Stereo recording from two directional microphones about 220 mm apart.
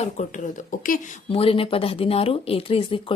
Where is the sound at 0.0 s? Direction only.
35° left (ahead or behind).